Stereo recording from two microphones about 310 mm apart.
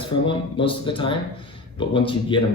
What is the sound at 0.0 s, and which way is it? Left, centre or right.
Speech, centre.